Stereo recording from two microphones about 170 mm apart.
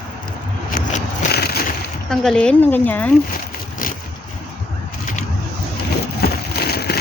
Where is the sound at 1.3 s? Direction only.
65° left (ahead or behind).